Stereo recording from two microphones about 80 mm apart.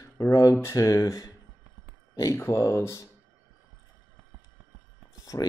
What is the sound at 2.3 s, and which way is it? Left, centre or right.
Speech, left.